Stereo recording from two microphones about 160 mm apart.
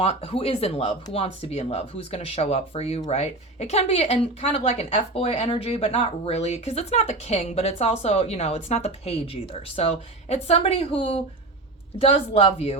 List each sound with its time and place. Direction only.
0.0 s speech: 40° left (ahead or behind)